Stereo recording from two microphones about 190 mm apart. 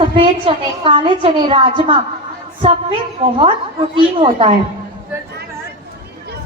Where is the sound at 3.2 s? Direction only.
30° right (ahead or behind).